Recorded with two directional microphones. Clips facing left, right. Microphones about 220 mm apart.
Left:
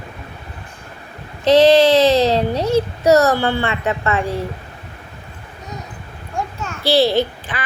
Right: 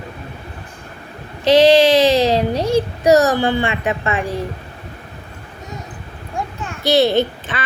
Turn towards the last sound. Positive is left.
turn(degrees=-20)  # may be behind; listen again after turning